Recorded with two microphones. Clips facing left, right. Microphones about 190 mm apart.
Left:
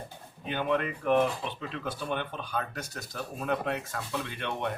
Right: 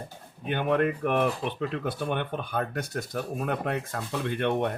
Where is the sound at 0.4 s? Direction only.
55° right (ahead or behind).